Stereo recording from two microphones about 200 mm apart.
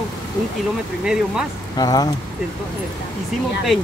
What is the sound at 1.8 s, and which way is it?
Speech, 20° left (ahead or behind).